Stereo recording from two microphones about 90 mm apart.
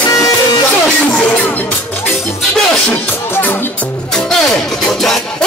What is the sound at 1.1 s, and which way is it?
Music, 15° left (ahead or behind).